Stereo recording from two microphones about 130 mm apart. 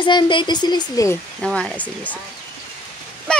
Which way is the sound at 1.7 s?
10° right (ahead or behind).